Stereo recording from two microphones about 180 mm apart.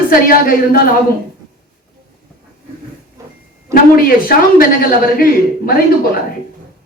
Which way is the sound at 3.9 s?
50° left (ahead or behind).